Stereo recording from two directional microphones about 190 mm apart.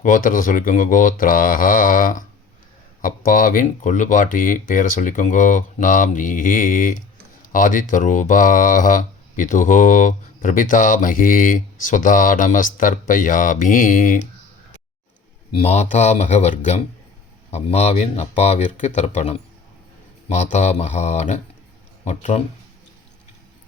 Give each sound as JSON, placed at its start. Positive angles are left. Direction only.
{"t": 0.0, "sound": "speech", "side_deg": 45}
{"t": 15.5, "sound": "speech", "side_deg": 35}